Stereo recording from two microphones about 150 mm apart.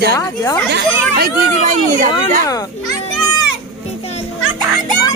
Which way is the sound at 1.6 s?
55° right (ahead or behind).